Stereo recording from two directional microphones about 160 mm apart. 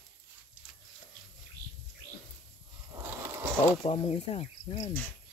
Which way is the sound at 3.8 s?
35° left (ahead or behind).